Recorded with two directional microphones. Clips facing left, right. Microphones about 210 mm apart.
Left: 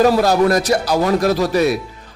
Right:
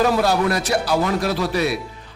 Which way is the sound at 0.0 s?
40° left (ahead or behind).